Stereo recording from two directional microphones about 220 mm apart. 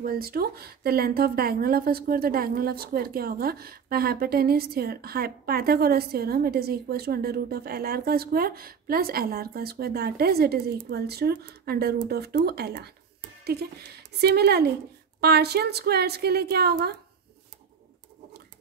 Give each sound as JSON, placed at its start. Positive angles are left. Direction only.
{"t": 0.0, "sound": "speech", "side_deg": -40}
{"t": 13.4, "sound": "a sound", "side_deg": -45}
{"t": 14.2, "sound": "speech", "side_deg": -50}